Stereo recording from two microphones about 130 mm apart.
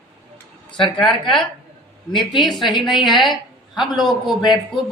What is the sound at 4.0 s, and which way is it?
Speech, centre (ahead or behind).